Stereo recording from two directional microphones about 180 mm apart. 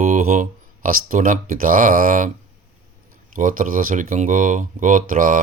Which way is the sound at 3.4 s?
50° right (ahead or behind).